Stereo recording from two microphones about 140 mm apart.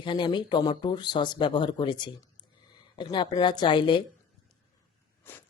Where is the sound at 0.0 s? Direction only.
35° left (ahead or behind).